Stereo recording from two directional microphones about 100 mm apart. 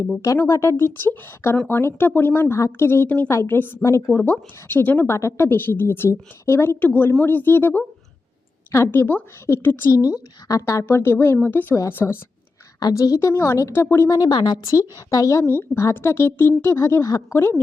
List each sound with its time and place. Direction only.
0.2 s speech: 30° left (ahead or behind)
14.2 s a woman's voice: 45° left (ahead or behind)
14.7 s speech: 35° left (ahead or behind)